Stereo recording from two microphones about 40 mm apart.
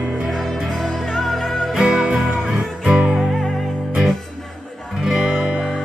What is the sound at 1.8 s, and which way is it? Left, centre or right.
Music, centre.